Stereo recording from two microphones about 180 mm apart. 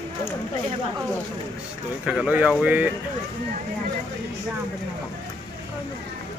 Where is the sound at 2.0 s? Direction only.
5° right (ahead or behind).